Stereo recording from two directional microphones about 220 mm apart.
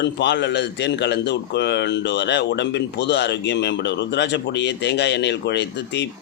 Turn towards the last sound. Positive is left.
turn(degrees=50)  # may be behind; listen again after turning